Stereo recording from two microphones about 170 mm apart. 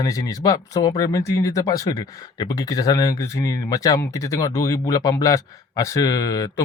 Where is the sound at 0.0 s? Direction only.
20° left (ahead or behind).